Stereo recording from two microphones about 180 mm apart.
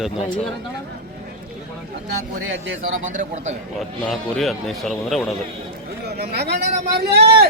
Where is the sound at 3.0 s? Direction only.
45° right (ahead or behind).